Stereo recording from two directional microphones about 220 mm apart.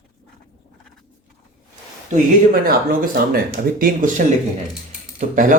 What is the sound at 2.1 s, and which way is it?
Speech, 40° right (ahead or behind).